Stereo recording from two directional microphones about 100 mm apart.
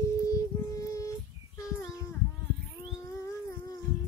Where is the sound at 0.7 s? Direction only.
35° left (ahead or behind).